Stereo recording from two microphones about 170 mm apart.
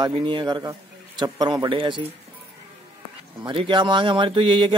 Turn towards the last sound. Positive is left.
turn(degrees=-30)  # may be behind; listen again after turning